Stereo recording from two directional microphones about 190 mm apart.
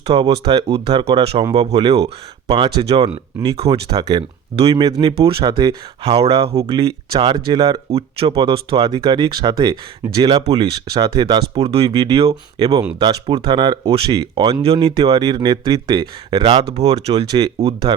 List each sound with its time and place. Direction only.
0.0 s speech: 30° right (ahead or behind)
6.0 s speech: 35° right (ahead or behind)
16.7 s speech: 35° right (ahead or behind)